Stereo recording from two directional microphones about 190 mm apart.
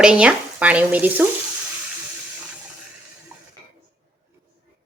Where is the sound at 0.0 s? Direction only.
5° right (ahead or behind).